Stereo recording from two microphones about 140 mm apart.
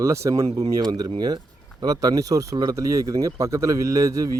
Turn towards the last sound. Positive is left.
turn(degrees=-25)  # may be behind; listen again after turning